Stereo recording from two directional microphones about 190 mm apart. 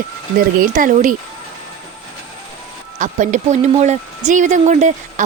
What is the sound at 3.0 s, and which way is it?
Speech, 40° right (ahead or behind).